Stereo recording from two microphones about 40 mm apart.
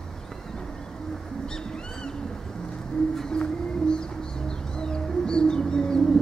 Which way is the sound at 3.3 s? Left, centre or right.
Left.